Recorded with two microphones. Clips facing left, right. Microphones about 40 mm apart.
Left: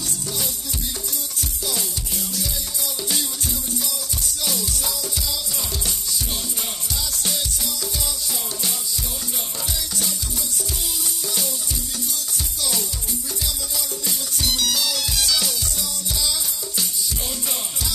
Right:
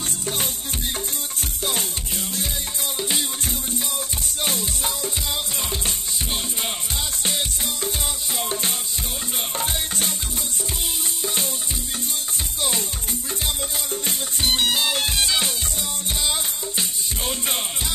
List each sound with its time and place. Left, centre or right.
1.6 s music: right
3.0 s music: right
4.4 s music: right
9.6 s music: right
14.0 s music: right